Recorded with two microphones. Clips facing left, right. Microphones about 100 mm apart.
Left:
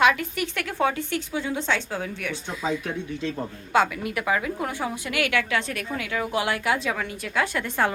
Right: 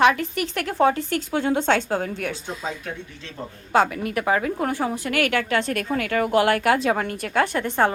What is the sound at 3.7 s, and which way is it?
A woman's voice, 35° right (ahead or behind).